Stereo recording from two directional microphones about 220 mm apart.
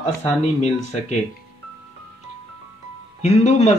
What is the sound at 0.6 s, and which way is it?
Speech, 30° left (ahead or behind).